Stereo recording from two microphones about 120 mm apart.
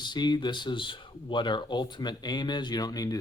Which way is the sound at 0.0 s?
35° left (ahead or behind).